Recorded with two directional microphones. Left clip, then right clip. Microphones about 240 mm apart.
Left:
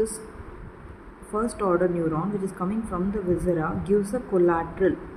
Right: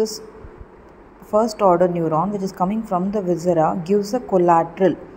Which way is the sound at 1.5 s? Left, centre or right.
Centre.